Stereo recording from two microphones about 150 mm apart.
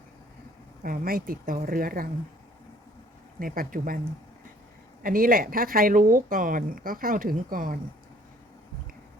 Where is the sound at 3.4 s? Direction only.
70° right (ahead or behind).